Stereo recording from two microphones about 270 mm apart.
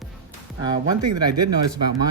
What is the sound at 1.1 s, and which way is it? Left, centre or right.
Speech, right.